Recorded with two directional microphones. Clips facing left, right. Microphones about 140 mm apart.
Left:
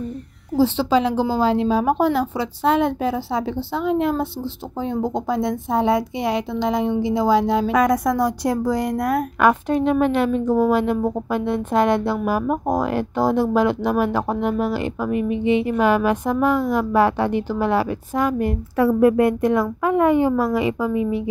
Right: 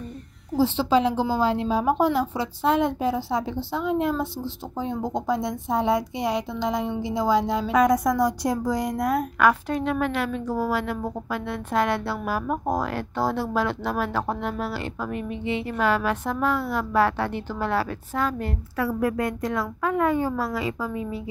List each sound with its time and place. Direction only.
0.6 s a woman's voice: 85° left; by 9.2 s 60° left (ahead or behind)
9.4 s a woman's voice: 20° left (ahead or behind)
18.8 s a woman's voice: 25° left (ahead or behind)